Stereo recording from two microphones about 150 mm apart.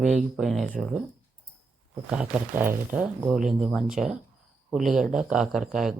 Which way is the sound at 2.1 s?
10° right (ahead or behind).